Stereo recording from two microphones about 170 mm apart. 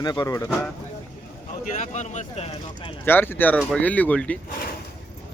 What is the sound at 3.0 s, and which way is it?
Speech, 10° left (ahead or behind).